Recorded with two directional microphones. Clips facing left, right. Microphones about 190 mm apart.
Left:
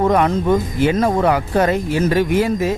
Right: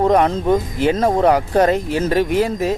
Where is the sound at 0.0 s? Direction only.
30° right (ahead or behind).